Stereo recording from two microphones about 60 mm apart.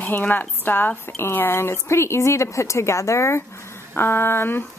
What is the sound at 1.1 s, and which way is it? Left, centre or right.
Speech, left.